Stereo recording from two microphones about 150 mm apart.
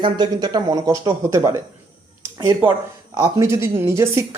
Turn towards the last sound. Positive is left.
turn(degrees=-20)  # may be behind; listen again after turning